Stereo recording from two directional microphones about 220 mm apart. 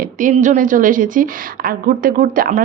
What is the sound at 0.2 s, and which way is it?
A woman's voice, 35° right (ahead or behind).